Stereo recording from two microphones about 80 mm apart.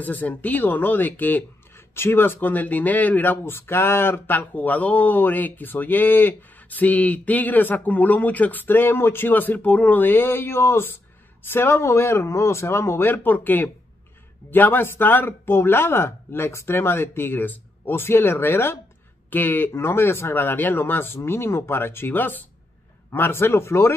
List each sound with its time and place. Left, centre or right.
0.0 s speech: left